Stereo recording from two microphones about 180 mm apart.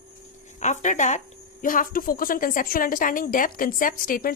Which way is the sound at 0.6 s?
40° left (ahead or behind).